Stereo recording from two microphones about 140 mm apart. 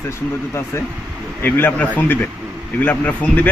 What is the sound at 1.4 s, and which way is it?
Speech, 15° left (ahead or behind).